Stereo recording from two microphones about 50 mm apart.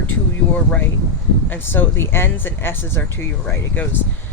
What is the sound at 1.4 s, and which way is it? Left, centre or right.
Speech, left.